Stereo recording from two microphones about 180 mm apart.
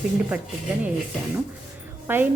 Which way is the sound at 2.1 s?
10° right (ahead or behind).